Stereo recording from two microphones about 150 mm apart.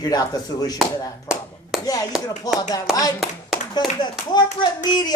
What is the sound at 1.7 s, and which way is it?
Chop, centre (ahead or behind).